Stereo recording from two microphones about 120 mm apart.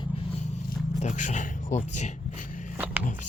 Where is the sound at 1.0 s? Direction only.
85° left.